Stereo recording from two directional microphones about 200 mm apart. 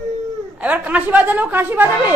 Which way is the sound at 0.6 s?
5° right (ahead or behind).